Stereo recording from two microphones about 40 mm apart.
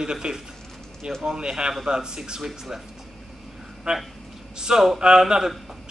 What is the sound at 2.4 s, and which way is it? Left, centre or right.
Speech, centre.